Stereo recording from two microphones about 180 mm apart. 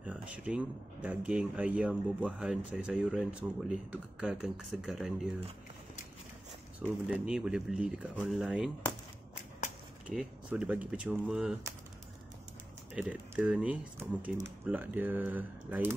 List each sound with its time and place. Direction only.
0.0 s speech: 5° right (ahead or behind)
7.1 s speech: 5° right (ahead or behind)
10.0 s speech: 5° right (ahead or behind)
12.9 s speech: 5° right (ahead or behind)